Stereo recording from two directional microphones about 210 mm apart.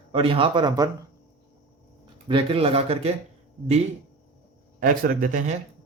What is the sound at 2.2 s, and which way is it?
Speech, 25° right (ahead or behind).